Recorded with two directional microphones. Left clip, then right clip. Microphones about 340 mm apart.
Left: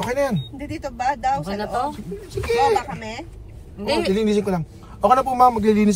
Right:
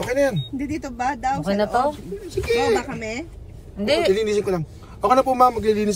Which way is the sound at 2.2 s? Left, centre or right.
Centre.